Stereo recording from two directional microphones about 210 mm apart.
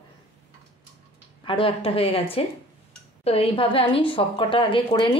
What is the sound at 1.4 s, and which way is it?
Speech, 25° left (ahead or behind).